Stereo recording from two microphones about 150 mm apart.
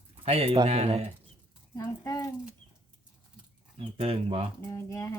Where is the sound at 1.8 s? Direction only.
25° left (ahead or behind).